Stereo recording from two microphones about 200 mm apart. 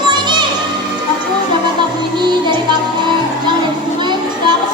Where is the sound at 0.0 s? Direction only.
20° right (ahead or behind).